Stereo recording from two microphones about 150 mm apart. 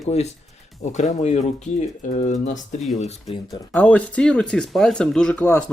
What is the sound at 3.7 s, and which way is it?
Speech, 10° left (ahead or behind).